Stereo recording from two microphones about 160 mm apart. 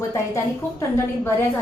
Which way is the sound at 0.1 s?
15° left (ahead or behind).